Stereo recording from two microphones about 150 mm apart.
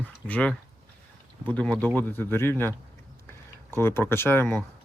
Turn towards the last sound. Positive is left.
turn(degrees=15)  # may be behind; listen again after turning